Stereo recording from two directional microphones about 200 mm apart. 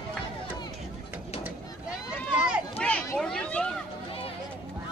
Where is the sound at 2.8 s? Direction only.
5° left (ahead or behind).